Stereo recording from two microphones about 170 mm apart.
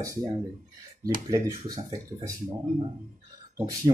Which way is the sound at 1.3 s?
20° right (ahead or behind).